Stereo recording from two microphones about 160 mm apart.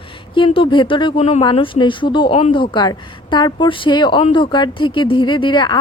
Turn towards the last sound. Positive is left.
turn(degrees=30)  # may be behind; listen again after turning